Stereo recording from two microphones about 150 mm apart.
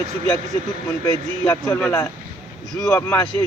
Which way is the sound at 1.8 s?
10° left (ahead or behind).